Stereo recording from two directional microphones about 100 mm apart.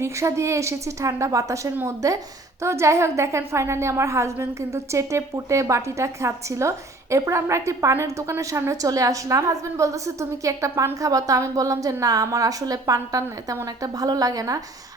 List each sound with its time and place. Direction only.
0.0 s a woman's voice: 30° right (ahead or behind)